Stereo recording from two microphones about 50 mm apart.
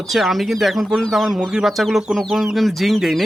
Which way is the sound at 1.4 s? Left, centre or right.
Centre.